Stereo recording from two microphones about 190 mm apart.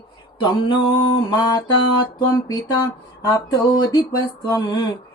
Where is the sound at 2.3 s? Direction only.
20° left (ahead or behind).